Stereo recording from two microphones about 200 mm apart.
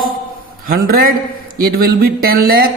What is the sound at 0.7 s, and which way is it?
A man's voice, 45° right (ahead or behind).